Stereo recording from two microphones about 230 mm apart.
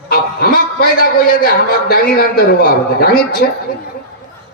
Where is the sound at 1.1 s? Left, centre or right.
Left.